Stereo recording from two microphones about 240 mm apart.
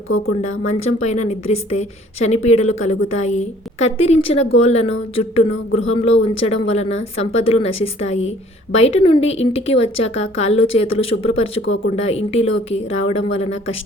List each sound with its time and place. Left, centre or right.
0.4 s a woman's voice: left